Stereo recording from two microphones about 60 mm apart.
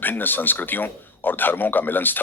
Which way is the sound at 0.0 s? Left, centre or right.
Left.